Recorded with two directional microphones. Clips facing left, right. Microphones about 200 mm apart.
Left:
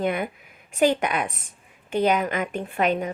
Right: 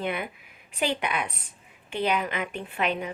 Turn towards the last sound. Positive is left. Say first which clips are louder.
# left 5 dB
turn(degrees=45)  # may be behind; listen again after turning